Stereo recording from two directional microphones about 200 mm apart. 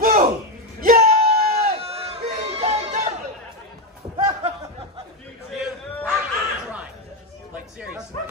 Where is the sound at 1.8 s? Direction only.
30° right (ahead or behind).